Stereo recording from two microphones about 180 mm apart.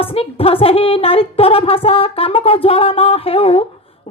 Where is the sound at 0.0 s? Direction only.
30° left (ahead or behind).